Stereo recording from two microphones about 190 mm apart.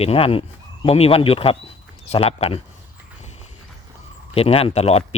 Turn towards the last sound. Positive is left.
turn(degrees=35)  # may be behind; listen again after turning